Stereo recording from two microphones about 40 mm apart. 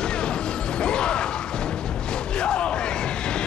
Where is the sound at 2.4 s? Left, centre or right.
Left.